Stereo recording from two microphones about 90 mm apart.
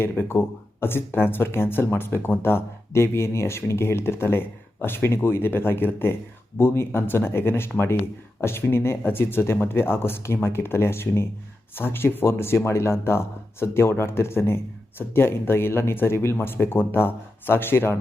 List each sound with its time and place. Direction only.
0.0 s speech: 25° left (ahead or behind)